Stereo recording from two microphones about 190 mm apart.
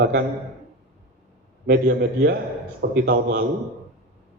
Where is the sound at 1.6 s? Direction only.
65° right (ahead or behind).